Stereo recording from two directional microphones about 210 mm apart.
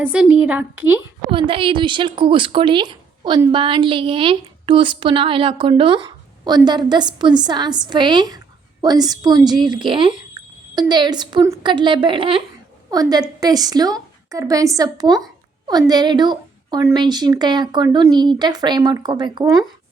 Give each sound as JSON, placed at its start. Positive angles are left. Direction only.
{"t": 0.0, "sound": "a woman's voice", "side_deg": -5}
{"t": 1.3, "sound": "a woman's voice", "side_deg": -25}